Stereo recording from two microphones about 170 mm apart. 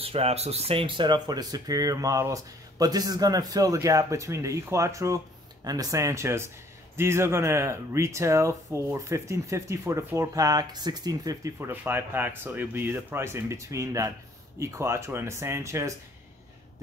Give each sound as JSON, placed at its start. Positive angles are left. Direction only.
{"t": 0.0, "sound": "speech", "side_deg": -35}